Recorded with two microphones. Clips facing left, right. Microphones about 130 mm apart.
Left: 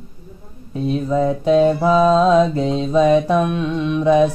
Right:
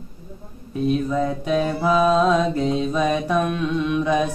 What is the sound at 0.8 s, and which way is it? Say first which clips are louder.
Speech: left 3 dB; 30° left (ahead or behind).